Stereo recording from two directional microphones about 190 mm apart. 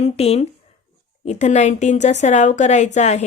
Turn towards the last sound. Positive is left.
turn(degrees=40)  # may be behind; listen again after turning